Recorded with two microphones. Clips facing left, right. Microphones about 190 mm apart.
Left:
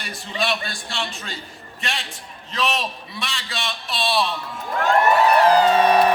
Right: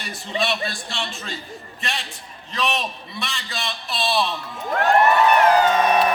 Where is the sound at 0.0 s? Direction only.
Centre (ahead or behind).